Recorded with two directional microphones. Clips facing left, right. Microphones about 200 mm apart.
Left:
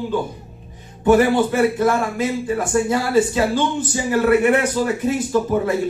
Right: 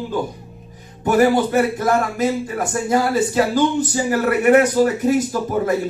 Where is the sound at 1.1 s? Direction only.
40° right (ahead or behind).